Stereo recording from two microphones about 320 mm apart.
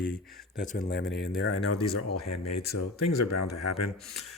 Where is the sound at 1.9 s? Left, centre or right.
Left.